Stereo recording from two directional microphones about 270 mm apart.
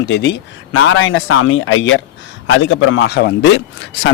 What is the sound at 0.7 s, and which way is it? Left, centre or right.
Speech, left.